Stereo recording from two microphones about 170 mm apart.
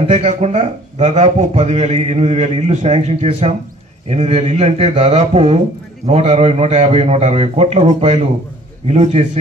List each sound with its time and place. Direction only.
0.1 s a man's voice: 40° right (ahead or behind)